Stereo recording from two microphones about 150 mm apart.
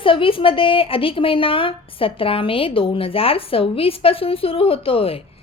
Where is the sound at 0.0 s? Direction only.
35° left (ahead or behind).